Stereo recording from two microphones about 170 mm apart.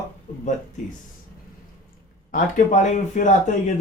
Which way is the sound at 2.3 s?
45° left (ahead or behind).